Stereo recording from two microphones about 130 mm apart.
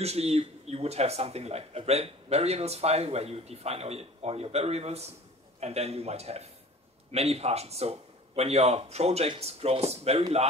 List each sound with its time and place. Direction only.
0.0 s speech: 55° right (ahead or behind)